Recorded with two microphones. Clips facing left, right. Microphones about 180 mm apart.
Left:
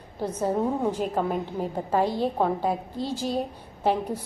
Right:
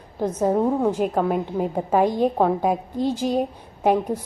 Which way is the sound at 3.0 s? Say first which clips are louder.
Right 6 dB; 50° right (ahead or behind).